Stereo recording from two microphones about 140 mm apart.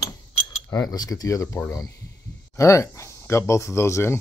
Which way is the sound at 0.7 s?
25° left (ahead or behind).